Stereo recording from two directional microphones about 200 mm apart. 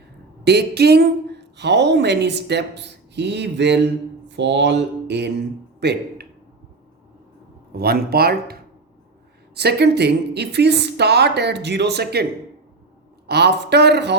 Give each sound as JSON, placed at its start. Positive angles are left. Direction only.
{"t": 0.4, "sound": "speech", "side_deg": -55}
{"t": 4.3, "sound": "mantra", "side_deg": -60}
{"t": 5.8, "sound": "speech", "side_deg": -55}
{"t": 7.7, "sound": "speech", "side_deg": -50}
{"t": 9.6, "sound": "speech", "side_deg": -55}
{"t": 13.2, "sound": "speech", "side_deg": -55}